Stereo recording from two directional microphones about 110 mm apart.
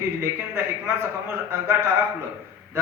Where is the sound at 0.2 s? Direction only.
25° right (ahead or behind).